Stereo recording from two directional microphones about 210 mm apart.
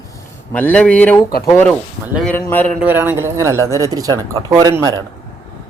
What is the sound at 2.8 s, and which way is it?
Speech, 10° right (ahead or behind).